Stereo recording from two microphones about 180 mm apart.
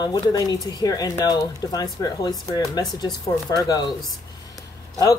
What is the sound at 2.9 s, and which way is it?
Speech, 20° left (ahead or behind).